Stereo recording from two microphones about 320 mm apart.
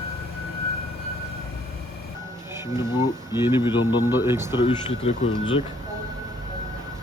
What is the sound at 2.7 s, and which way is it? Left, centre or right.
Speech, centre.